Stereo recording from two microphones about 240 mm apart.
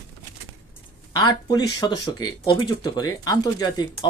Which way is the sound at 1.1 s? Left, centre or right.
Centre.